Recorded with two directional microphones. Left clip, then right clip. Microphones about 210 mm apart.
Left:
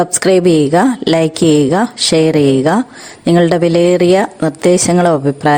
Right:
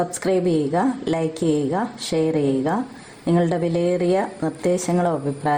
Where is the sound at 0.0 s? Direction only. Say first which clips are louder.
Left 10 dB; 35° left (ahead or behind).